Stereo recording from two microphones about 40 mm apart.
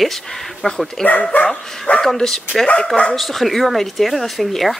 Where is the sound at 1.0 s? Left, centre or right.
Centre.